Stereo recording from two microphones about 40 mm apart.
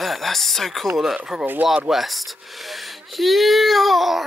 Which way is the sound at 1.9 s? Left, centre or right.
Centre.